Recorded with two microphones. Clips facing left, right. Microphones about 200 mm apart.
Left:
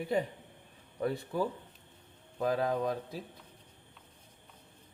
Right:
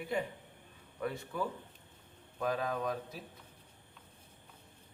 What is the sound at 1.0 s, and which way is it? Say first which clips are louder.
Speech: left 5 dB; 35° left (ahead or behind).